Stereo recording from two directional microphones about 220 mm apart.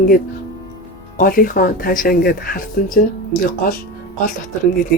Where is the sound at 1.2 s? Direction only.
40° left (ahead or behind).